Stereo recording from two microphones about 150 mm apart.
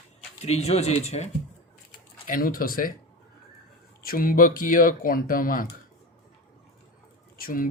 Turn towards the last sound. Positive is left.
turn(degrees=70)  # may be behind; listen again after turning